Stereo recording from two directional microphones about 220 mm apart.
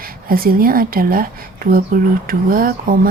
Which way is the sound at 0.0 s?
40° right (ahead or behind).